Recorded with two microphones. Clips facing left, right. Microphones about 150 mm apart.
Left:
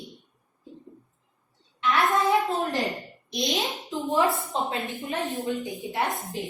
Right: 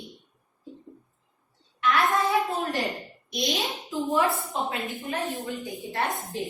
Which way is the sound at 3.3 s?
20° left (ahead or behind).